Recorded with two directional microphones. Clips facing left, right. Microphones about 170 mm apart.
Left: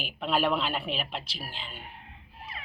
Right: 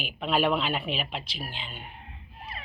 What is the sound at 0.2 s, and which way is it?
Speech, centre (ahead or behind).